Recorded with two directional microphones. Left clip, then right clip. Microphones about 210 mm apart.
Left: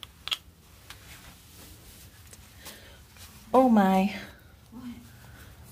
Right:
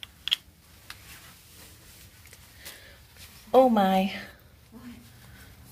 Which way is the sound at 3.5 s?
Centre (ahead or behind).